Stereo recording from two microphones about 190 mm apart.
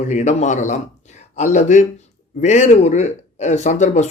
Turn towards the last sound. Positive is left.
turn(degrees=40)  # may be behind; listen again after turning